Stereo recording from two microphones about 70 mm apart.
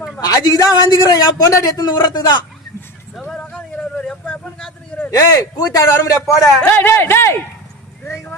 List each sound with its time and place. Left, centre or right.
0.2 s a man's voice: left
3.2 s a sound: centre
5.1 s a man's voice: left
6.7 s speech: left
8.0 s clip-clop: left